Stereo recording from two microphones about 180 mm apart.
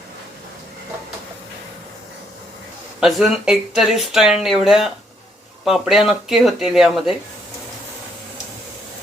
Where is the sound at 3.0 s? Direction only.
Centre (ahead or behind).